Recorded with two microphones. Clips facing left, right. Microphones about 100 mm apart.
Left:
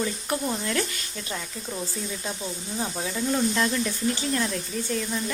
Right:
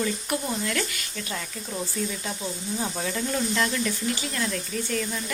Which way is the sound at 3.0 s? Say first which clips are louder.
Left 5 dB; 10° left (ahead or behind).